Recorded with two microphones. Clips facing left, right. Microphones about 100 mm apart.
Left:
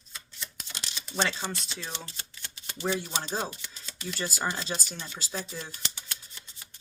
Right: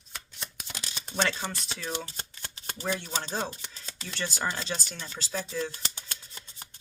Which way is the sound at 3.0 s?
10° left (ahead or behind).